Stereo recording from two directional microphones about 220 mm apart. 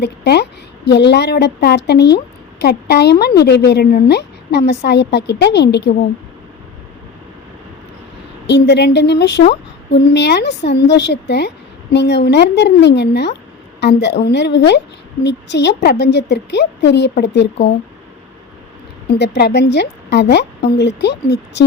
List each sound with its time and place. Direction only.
0.0 s a woman's voice: 50° left (ahead or behind)
8.4 s a woman's voice: 50° left (ahead or behind)
19.0 s a woman's voice: 50° left (ahead or behind)